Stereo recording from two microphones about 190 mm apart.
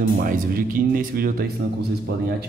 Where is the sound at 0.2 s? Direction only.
45° right (ahead or behind).